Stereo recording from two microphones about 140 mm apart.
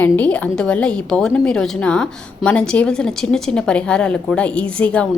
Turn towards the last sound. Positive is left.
turn(degrees=10)  # may be behind; listen again after turning